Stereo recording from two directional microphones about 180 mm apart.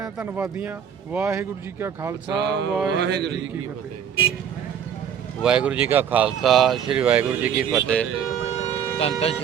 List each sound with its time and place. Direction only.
0.0 s speech: 5° right (ahead or behind)
2.3 s speech: 70° right (ahead or behind)
5.4 s speech: 5° right (ahead or behind)
9.0 s speech: 30° left (ahead or behind)